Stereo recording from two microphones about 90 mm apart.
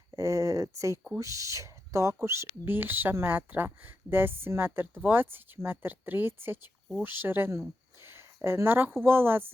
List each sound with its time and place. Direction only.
0.1 s speech: 35° right (ahead or behind)